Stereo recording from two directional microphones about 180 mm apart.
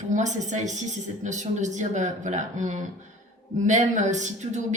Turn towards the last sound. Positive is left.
turn(degrees=-40)  # may be behind; listen again after turning